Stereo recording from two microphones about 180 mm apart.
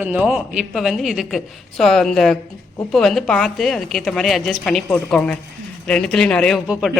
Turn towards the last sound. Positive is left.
turn(degrees=-5)  # may be behind; listen again after turning